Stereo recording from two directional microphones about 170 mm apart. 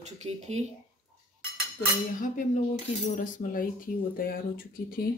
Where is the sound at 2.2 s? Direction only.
50° left (ahead or behind).